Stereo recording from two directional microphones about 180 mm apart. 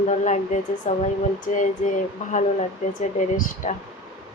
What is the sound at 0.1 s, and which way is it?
Speech, 40° left (ahead or behind).